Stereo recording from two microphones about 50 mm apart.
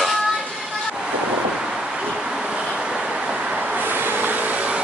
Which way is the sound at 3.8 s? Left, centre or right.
Right.